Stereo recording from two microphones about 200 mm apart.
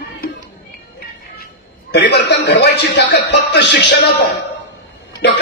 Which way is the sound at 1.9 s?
60° left (ahead or behind).